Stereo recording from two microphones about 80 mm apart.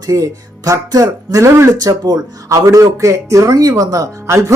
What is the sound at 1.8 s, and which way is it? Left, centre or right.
Speech, right.